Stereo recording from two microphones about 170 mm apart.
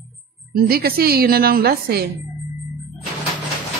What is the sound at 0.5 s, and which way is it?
A woman's voice, 60° right (ahead or behind).